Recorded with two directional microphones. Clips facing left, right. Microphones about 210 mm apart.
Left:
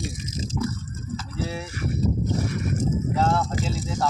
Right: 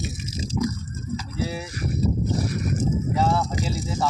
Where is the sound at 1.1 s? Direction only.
5° right (ahead or behind).